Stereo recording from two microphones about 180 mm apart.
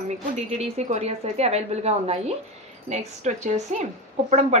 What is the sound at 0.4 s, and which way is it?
Speech, 35° right (ahead or behind).